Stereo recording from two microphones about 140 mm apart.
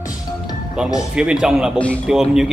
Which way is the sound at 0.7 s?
5° right (ahead or behind).